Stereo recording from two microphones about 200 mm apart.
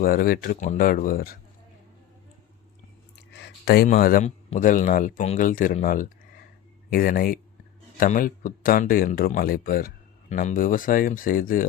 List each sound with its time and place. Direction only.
0.0 s speech: 45° left (ahead or behind)
3.3 s a sound: 55° left (ahead or behind)
3.8 s speech: 40° left (ahead or behind)